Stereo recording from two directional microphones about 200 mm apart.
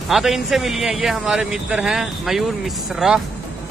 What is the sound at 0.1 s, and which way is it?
Speech, centre (ahead or behind).